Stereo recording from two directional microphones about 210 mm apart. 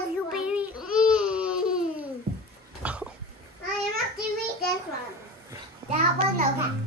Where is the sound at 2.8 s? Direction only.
5° right (ahead or behind).